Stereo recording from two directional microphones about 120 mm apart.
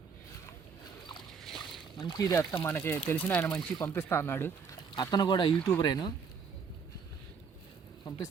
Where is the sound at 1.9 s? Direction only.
35° left (ahead or behind).